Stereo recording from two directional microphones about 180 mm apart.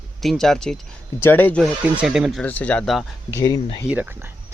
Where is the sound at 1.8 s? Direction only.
5° right (ahead or behind).